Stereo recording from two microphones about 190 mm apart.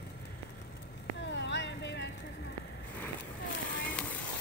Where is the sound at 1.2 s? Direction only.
65° left (ahead or behind).